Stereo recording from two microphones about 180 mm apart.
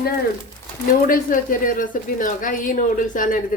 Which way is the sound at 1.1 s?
50° left (ahead or behind).